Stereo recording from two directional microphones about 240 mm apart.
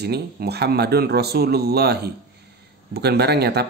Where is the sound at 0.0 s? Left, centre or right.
Right.